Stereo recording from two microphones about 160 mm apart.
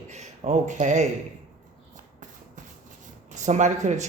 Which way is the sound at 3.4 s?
45° right (ahead or behind).